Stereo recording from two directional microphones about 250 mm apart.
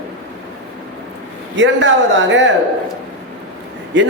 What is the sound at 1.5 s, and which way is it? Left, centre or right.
Speech, right.